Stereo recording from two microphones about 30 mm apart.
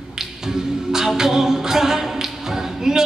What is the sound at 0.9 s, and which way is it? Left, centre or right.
A capella, centre.